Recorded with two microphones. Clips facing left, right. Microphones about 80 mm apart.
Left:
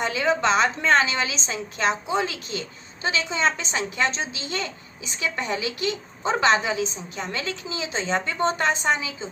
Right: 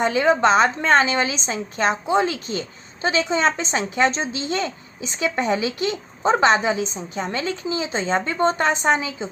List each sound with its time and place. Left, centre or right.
0.0 s a woman's voice: right